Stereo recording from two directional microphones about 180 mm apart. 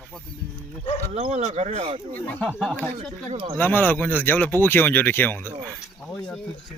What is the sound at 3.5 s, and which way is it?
Speech, 10° left (ahead or behind).